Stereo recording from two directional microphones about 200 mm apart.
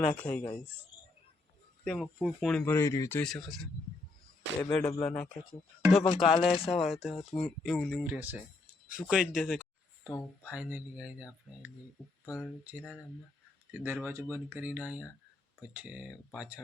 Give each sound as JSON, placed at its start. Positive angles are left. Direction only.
{"t": 0.1, "sound": "a man's voice", "side_deg": 5}
{"t": 1.8, "sound": "a man's voice", "side_deg": 5}
{"t": 4.6, "sound": "a man's voice", "side_deg": 10}
{"t": 6.0, "sound": "a sound", "side_deg": 25}
{"t": 6.7, "sound": "speech", "side_deg": 0}
{"t": 9.0, "sound": "a sound", "side_deg": -5}
{"t": 10.4, "sound": "speech", "side_deg": -5}
{"t": 12.3, "sound": "speech", "side_deg": -5}